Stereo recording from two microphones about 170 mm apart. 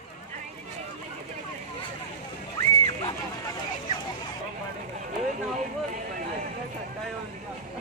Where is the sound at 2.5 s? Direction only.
20° left (ahead or behind).